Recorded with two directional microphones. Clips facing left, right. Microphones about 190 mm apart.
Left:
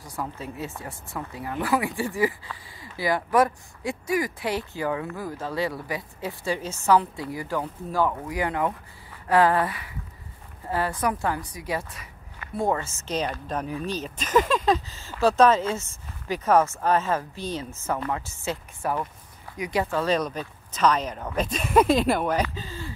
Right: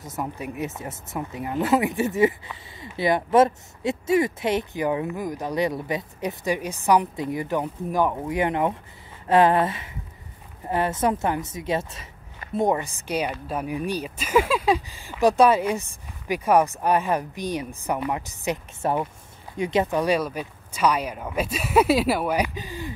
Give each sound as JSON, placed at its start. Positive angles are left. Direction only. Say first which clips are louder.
{"t": 0.0, "sound": "a woman's voice", "louder": "right 3 dB", "side_deg": -20}